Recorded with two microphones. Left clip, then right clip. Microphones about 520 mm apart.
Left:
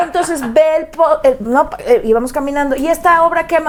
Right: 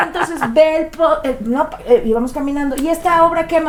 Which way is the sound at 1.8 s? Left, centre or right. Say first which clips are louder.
Right 1 dB; left.